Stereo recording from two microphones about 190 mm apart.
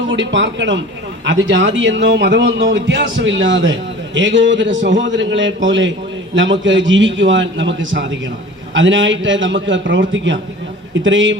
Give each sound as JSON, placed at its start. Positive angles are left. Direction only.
{"t": 0.1, "sound": "a man's voice", "side_deg": -75}